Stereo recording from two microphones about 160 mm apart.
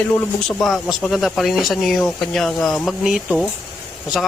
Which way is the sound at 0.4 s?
Centre (ahead or behind).